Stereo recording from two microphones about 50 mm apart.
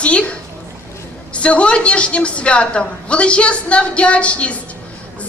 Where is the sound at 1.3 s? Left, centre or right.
Left.